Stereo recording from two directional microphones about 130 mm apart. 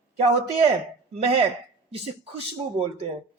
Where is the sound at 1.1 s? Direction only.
50° right (ahead or behind).